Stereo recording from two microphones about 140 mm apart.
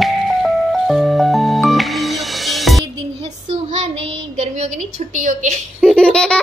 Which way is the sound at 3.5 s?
55° right (ahead or behind).